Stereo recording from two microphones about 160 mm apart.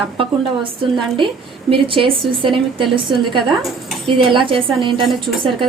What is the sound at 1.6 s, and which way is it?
A woman's voice, 35° right (ahead or behind).